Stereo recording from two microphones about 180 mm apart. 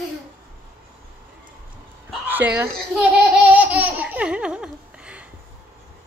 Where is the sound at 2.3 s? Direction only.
10° right (ahead or behind).